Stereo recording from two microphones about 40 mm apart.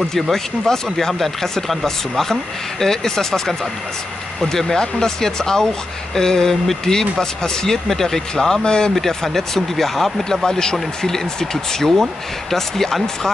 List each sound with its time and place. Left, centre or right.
0.1 s speech: centre
2.8 s speech: centre
8.9 s speech: centre
10.4 s speech: centre